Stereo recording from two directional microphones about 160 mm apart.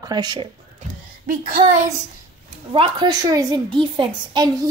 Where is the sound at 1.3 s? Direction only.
55° right (ahead or behind).